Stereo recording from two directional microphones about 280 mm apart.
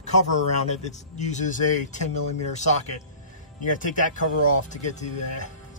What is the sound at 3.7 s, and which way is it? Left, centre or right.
A man's voice, left.